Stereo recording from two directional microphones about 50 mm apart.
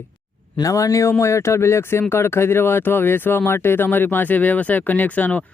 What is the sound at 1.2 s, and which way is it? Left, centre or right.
Speech, left.